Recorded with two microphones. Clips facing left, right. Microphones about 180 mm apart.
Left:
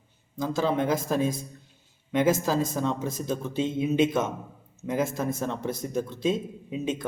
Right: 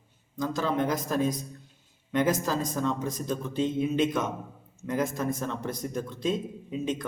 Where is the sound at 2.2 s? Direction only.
5° left (ahead or behind).